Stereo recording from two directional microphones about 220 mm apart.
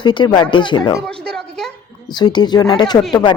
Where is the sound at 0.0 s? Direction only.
20° left (ahead or behind).